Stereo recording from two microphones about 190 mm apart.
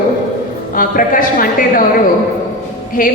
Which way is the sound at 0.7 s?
45° left (ahead or behind).